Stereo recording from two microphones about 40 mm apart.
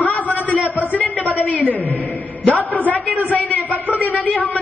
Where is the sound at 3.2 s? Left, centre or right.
Left.